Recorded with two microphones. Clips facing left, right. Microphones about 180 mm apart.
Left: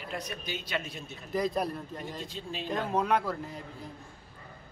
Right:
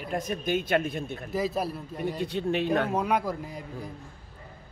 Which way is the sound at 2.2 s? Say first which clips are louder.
Right 11 dB; 65° right (ahead or behind).